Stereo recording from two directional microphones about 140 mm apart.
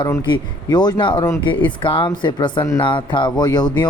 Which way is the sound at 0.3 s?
30° left (ahead or behind).